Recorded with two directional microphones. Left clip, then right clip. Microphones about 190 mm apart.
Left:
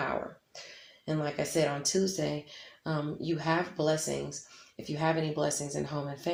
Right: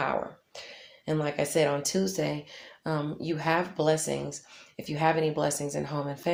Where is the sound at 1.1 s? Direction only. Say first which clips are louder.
Right 4 dB; 30° right (ahead or behind).